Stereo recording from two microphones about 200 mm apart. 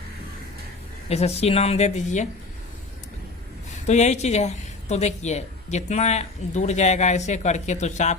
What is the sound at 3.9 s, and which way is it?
A woman's voice, 35° left (ahead or behind).